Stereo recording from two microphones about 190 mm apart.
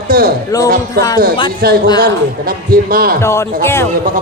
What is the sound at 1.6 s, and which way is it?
A man's voice, 55° right (ahead or behind).